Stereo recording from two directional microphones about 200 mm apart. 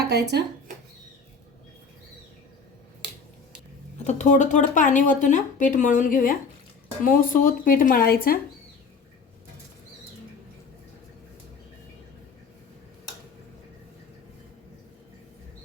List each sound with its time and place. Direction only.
0.0 s speech: 55° right (ahead or behind)
3.9 s speech: 35° left (ahead or behind)